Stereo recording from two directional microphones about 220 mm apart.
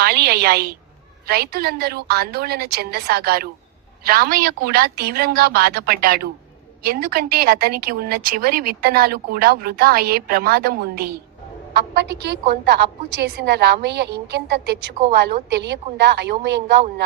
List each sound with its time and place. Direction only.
0.0 s speech: 45° right (ahead or behind)